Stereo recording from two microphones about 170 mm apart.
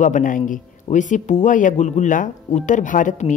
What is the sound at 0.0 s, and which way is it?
Speech, 50° left (ahead or behind).